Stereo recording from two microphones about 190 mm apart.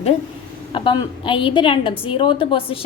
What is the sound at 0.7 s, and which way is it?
A woman's voice, 25° left (ahead or behind).